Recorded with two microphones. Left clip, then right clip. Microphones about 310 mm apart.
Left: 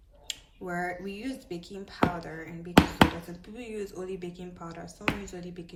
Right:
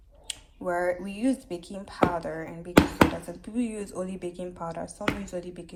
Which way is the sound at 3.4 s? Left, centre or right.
Centre.